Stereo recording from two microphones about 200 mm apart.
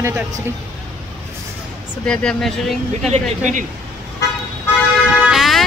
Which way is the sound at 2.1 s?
5° left (ahead or behind).